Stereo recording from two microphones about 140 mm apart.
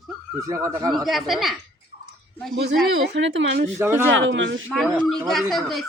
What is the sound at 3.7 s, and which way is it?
Speech, 20° right (ahead or behind).